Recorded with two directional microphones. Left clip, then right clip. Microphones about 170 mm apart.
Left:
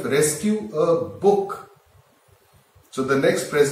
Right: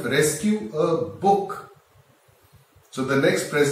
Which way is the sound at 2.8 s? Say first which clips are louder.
Left 1 dB; 5° right (ahead or behind).